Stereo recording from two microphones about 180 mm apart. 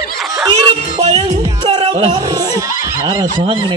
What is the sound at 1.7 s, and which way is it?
Music, 25° right (ahead or behind).